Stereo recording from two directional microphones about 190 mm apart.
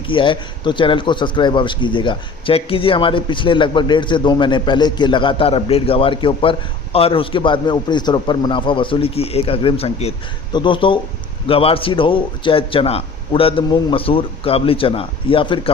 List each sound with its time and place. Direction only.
0.1 s a man's voice: 25° left (ahead or behind)